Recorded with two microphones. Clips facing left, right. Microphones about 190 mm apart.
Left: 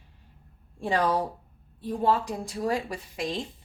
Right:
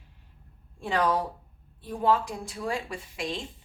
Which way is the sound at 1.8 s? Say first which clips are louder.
Even; 35° left (ahead or behind).